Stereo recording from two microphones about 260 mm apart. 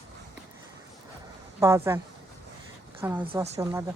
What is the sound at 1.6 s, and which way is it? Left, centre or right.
Speech, centre.